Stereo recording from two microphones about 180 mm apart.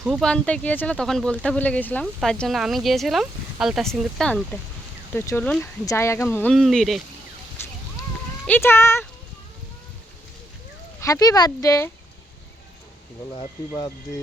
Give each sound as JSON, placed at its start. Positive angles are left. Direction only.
{"t": 0.0, "sound": "speech", "side_deg": 0}
{"t": 5.1, "sound": "speech", "side_deg": 15}
{"t": 8.4, "sound": "speech", "side_deg": 10}
{"t": 11.0, "sound": "speech", "side_deg": 20}
{"t": 13.7, "sound": "speech", "side_deg": 20}